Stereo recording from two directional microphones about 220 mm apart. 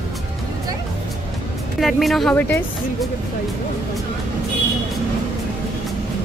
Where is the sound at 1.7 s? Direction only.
Centre (ahead or behind).